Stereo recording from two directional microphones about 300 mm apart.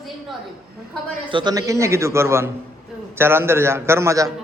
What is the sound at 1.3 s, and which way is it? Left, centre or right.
A man's voice, centre.